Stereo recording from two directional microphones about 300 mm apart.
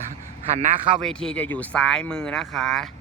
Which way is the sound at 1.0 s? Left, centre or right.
Centre.